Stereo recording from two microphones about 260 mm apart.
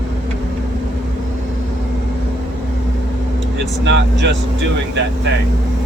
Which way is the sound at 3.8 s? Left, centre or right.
Right.